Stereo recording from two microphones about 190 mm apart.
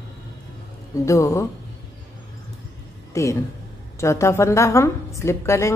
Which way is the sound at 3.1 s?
15° left (ahead or behind).